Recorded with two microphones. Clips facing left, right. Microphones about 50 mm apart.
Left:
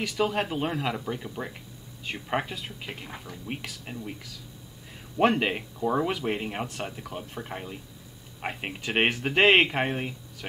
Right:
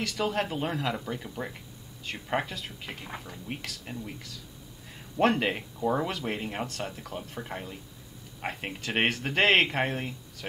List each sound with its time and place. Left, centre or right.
0.0 s speech: centre
2.4 s speech: centre
5.1 s speech: centre
6.0 s speech: centre
7.3 s speech: centre